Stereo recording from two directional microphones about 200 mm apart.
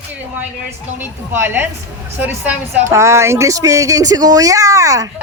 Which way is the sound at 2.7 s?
15° right (ahead or behind).